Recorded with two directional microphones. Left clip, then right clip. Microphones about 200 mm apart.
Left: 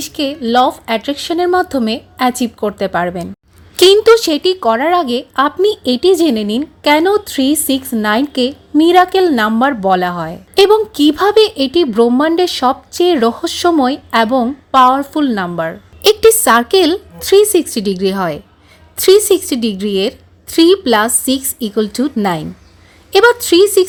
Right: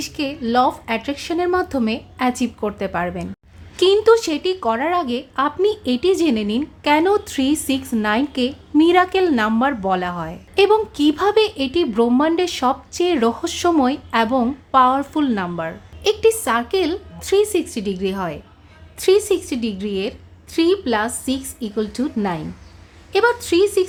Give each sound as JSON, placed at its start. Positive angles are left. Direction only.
{"t": 0.0, "sound": "a woman's voice", "side_deg": 25}